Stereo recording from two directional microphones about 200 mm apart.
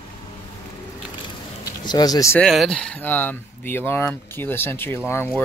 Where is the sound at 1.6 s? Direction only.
20° left (ahead or behind).